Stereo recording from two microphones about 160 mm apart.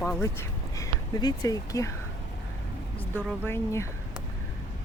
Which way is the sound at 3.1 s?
15° left (ahead or behind).